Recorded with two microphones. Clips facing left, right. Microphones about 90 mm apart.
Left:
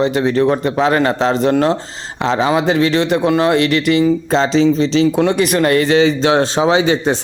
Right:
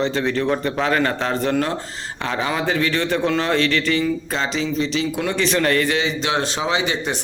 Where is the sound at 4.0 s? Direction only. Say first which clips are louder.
Left 8 dB; 30° left (ahead or behind).